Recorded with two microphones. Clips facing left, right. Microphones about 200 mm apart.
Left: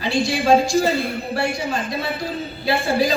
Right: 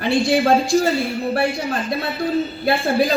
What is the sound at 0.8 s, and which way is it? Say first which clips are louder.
Speech: right 1 dB; 55° left (ahead or behind).